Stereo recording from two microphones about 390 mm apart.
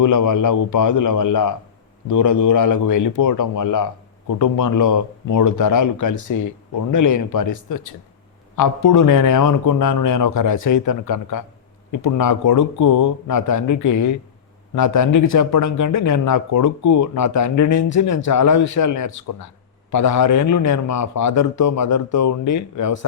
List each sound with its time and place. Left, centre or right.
0.0 s speech: left